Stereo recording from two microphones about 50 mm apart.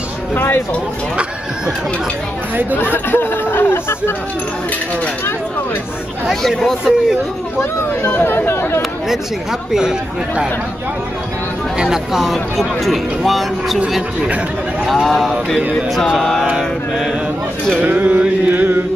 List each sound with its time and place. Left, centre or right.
0.3 s speech: left
2.8 s speech: left
6.9 s speech: centre
8.1 s speech: left
9.7 s speech: centre
11.8 s speech: centre
14.9 s speech: centre
16.2 s mantra: centre
16.4 s speech: centre
17.7 s a sound: right
18.5 s chant: right